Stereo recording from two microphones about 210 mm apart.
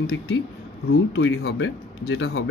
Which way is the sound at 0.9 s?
70° left (ahead or behind).